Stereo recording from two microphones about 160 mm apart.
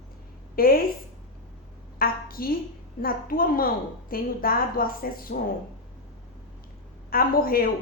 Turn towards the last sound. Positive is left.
turn(degrees=65)  # may be behind; listen again after turning